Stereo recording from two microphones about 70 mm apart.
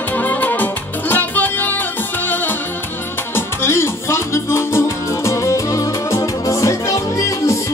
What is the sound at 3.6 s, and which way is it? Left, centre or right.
Music, left.